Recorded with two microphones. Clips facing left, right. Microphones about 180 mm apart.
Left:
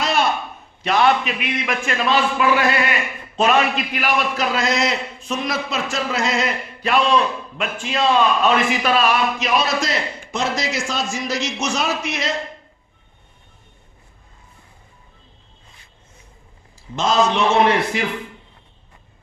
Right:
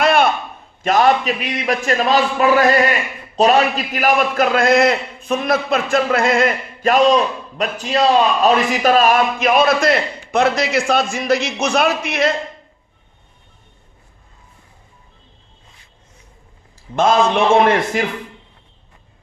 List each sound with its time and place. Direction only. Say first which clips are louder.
0.0 s a sound: right 6 dB; 55° right (ahead or behind)
0.8 s a man's voice: right 3 dB; 45° right (ahead or behind)
16.9 s a man's voice: right 4 dB; 55° right (ahead or behind)